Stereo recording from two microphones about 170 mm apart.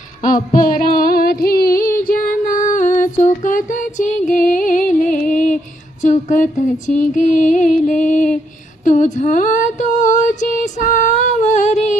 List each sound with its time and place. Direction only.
0.2 s female singing: 50° left (ahead or behind)
2.0 s music: 55° left (ahead or behind)
6.0 s a sound: 50° left (ahead or behind)
8.8 s female singing: 45° left (ahead or behind)